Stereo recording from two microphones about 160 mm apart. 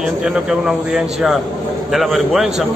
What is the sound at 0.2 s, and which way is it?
A man's voice, 5° right (ahead or behind).